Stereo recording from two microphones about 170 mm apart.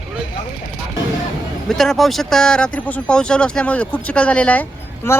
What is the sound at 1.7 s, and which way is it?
Speech, centre (ahead or behind).